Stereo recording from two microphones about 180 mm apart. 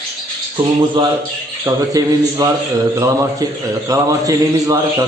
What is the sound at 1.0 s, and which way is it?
A man's voice, 25° right (ahead or behind).